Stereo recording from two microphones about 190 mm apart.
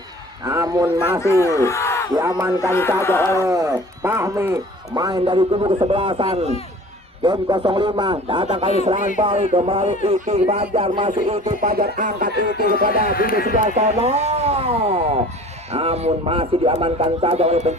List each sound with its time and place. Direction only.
0.4 s a man's voice: 15° right (ahead or behind)
1.2 s speech: 15° left (ahead or behind)
2.1 s a man's voice: 15° right (ahead or behind)
2.6 s speech: 15° left (ahead or behind)
3.4 s speech: 15° right (ahead or behind)
11.6 s speech: 50° right (ahead or behind)
13.1 s speech: 50° left (ahead or behind)
13.5 s speech: 35° right (ahead or behind)